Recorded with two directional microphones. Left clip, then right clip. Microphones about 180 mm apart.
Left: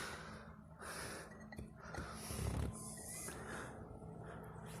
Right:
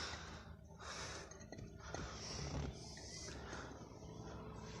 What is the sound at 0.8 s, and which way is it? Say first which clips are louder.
Snort: left 1 dB; 30° left (ahead or behind).